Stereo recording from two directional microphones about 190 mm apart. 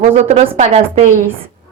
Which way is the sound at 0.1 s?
35° right (ahead or behind).